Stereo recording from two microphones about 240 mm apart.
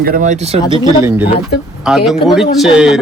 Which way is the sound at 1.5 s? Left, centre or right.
Left.